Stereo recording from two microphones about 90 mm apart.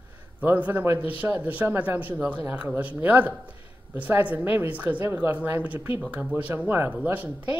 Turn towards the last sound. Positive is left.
turn(degrees=-20)  # may be behind; listen again after turning